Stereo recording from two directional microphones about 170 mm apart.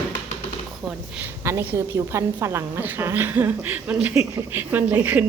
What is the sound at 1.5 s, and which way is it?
A woman's voice, 15° right (ahead or behind).